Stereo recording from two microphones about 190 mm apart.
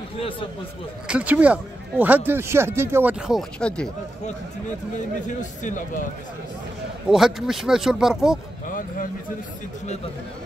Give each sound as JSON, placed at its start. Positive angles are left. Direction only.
{"t": 1.0, "sound": "speech", "side_deg": -5}
{"t": 4.9, "sound": "speech", "side_deg": 40}
{"t": 7.1, "sound": "speech", "side_deg": 0}
{"t": 8.6, "sound": "speech", "side_deg": 45}